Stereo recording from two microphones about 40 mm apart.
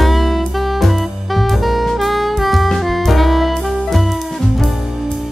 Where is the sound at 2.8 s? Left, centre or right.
Centre.